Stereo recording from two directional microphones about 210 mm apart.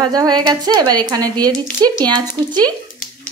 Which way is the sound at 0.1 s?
20° right (ahead or behind).